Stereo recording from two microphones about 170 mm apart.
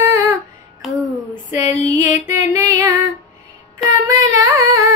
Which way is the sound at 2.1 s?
15° right (ahead or behind).